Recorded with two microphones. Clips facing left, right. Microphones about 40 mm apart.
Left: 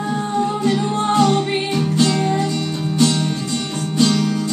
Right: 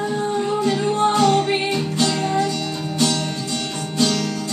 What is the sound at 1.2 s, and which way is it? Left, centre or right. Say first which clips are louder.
Music: even; centre.